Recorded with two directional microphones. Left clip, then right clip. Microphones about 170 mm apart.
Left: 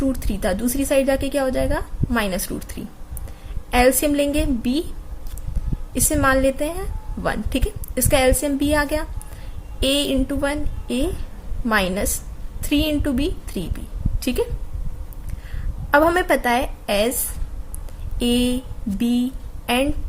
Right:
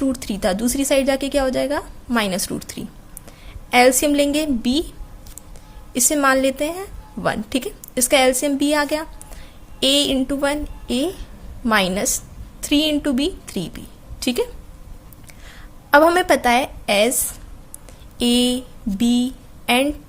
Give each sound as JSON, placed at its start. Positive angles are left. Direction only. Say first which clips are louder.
{"t": 0.0, "sound": "a woman's voice", "louder": "right 2 dB", "side_deg": -35}
{"t": 5.9, "sound": "a woman's voice", "louder": "right 2 dB", "side_deg": -35}
{"t": 15.9, "sound": "a woman's voice", "louder": "right 3 dB", "side_deg": -40}